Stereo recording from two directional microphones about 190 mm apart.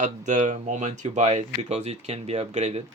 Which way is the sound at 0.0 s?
40° right (ahead or behind).